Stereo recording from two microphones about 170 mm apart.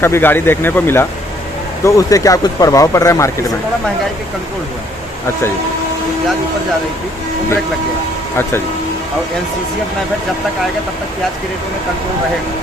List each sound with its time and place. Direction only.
0.0 s speech: 15° left (ahead or behind)